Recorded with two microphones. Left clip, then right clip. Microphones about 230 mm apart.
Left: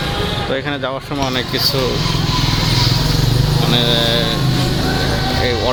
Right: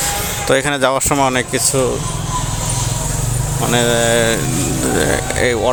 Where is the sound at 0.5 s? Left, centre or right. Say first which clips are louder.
Right 6 dB; right.